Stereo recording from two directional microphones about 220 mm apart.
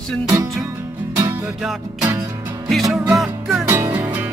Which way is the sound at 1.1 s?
15° right (ahead or behind).